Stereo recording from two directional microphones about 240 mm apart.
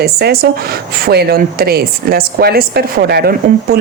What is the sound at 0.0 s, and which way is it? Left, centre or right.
Speech, right.